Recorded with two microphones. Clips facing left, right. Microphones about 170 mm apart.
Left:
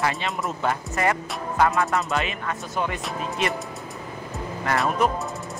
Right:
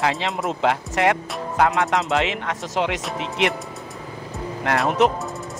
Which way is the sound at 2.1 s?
90° right.